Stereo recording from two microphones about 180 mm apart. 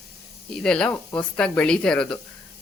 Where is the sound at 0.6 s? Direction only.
5° left (ahead or behind).